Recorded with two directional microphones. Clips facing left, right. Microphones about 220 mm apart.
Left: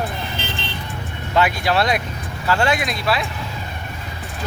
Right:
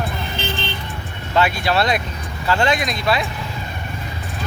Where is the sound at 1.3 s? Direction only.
15° left (ahead or behind).